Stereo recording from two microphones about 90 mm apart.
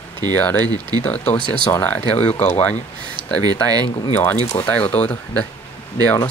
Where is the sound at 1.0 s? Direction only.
15° left (ahead or behind).